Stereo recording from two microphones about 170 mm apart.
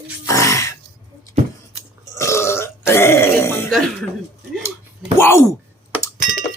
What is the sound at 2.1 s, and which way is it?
Burping, 15° left (ahead or behind).